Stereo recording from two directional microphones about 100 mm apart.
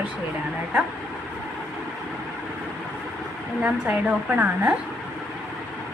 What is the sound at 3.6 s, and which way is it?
A woman's voice, 15° right (ahead or behind).